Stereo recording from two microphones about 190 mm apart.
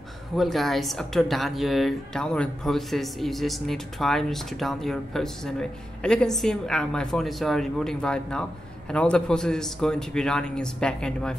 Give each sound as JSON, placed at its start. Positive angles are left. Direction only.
{"t": 0.4, "sound": "speech", "side_deg": 0}